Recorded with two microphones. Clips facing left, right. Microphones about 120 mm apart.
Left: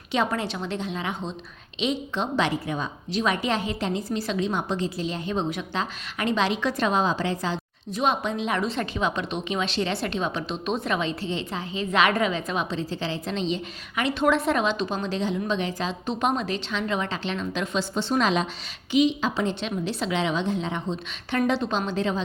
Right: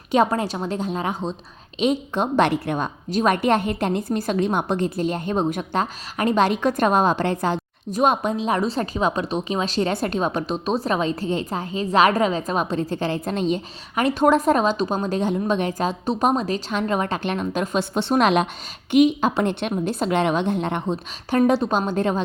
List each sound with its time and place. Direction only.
0.1 s a woman's voice: 40° right (ahead or behind); by 20.9 s 60° right (ahead or behind)
21.2 s a woman's voice: 40° right (ahead or behind)